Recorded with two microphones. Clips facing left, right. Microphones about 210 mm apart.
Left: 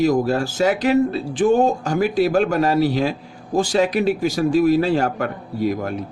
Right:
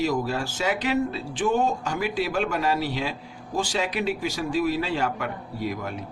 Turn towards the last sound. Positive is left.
turn(degrees=45)  # may be behind; listen again after turning